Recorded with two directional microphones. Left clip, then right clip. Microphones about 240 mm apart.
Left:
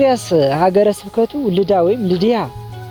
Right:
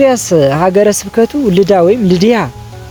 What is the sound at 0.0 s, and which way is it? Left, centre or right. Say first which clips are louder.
Speech: right 4 dB; left.